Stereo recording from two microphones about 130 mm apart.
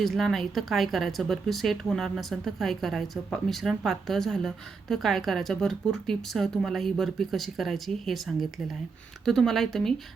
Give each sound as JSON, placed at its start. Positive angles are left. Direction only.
{"t": 0.0, "sound": "speech", "side_deg": 0}